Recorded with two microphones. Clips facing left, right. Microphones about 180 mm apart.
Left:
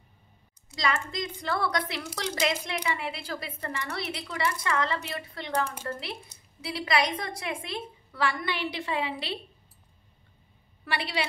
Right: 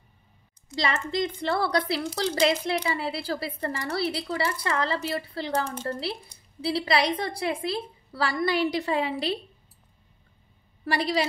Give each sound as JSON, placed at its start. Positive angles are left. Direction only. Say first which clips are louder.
{"t": 0.7, "sound": "a woman's voice", "louder": "right 3 dB", "side_deg": -30}
{"t": 10.9, "sound": "a woman's voice", "louder": "right 6 dB", "side_deg": -40}